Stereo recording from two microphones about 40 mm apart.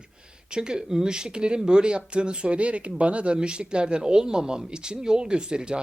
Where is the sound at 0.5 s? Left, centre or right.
Centre.